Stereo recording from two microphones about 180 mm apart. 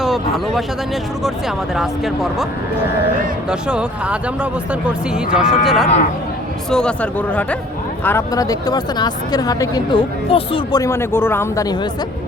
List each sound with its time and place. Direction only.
0.0 s speech: centre (ahead or behind)
3.5 s speech: 5° right (ahead or behind); by 11.9 s 20° left (ahead or behind)